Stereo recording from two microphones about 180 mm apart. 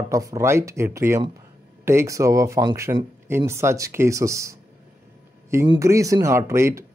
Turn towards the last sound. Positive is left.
turn(degrees=-15)  # may be behind; listen again after turning